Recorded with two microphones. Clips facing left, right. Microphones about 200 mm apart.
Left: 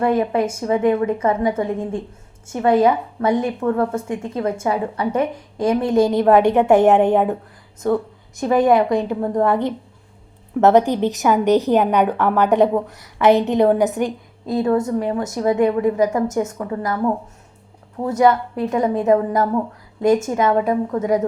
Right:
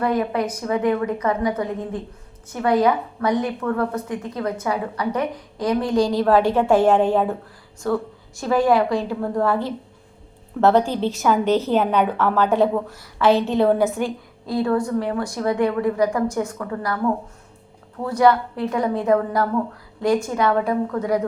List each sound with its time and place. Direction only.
0.0 s a woman's voice: 25° left (ahead or behind)